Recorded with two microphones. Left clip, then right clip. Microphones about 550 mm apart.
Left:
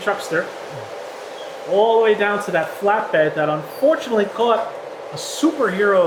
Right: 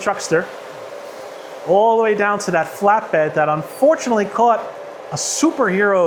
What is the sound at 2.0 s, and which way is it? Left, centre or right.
Speech, right.